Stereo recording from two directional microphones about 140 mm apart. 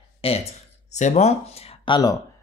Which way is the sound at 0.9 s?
55° left (ahead or behind).